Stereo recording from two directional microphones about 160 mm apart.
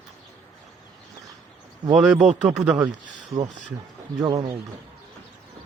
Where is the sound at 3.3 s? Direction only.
25° right (ahead or behind).